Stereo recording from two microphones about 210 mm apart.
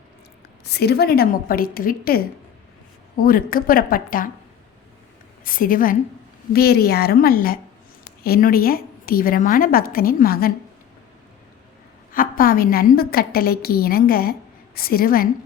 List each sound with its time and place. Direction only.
0.6 s a woman's voice: 50° left (ahead or behind)
5.5 s a woman's voice: 40° left (ahead or behind)
12.1 s a woman's voice: 40° left (ahead or behind)